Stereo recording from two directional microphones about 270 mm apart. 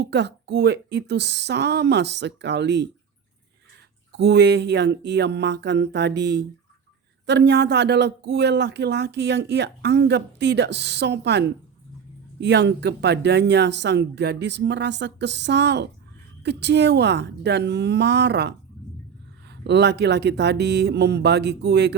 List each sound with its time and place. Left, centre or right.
0.0 s speech: right
4.1 s speech: right